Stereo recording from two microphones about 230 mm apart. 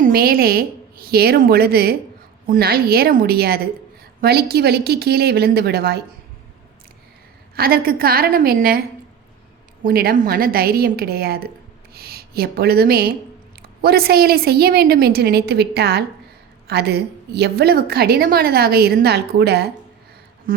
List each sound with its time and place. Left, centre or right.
0.0 s a woman's voice: right
7.5 s a woman's voice: right
9.8 s a woman's voice: right